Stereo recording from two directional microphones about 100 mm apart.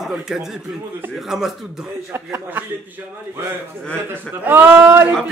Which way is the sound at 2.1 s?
25° right (ahead or behind).